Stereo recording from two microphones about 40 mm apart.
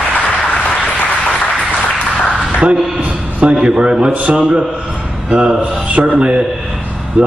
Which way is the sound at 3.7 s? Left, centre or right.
Right.